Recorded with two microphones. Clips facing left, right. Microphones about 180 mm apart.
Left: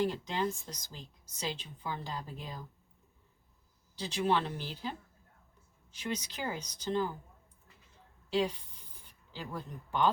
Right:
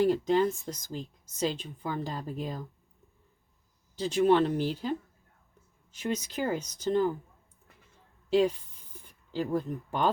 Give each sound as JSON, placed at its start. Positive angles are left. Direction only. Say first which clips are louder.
{"t": 0.0, "sound": "speech", "louder": "right 8 dB", "side_deg": -50}
{"t": 3.9, "sound": "speech", "louder": "right 8 dB", "side_deg": -50}
{"t": 6.0, "sound": "speech", "louder": "right 6 dB", "side_deg": -50}
{"t": 8.3, "sound": "speech", "louder": "right 7 dB", "side_deg": -50}